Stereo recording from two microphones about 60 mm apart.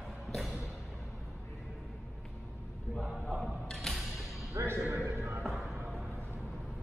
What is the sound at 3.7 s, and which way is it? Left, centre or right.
Music, centre.